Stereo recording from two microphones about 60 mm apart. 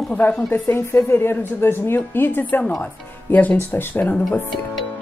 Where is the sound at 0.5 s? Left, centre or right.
Left.